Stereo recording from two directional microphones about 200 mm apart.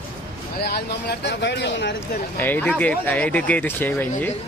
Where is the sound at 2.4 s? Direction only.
10° left (ahead or behind).